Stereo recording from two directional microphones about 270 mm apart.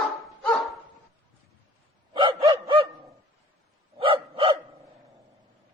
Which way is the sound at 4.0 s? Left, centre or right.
Right.